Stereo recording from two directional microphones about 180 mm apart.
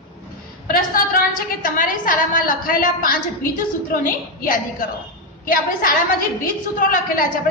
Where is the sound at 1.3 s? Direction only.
50° left (ahead or behind).